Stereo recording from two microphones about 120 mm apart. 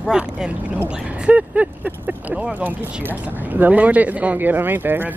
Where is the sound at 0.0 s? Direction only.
5° right (ahead or behind).